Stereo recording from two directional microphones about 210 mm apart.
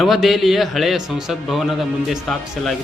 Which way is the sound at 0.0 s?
Centre (ahead or behind).